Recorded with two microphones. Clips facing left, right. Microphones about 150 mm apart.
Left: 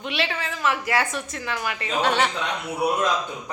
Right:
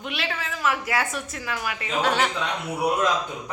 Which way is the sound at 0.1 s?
Centre (ahead or behind).